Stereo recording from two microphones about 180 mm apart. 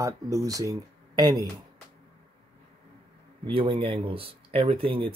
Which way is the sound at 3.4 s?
30° right (ahead or behind).